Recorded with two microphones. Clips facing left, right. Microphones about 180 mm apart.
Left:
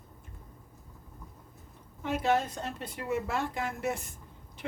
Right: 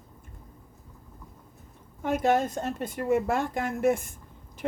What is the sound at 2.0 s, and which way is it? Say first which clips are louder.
Speech: right 4 dB; 50° right (ahead or behind).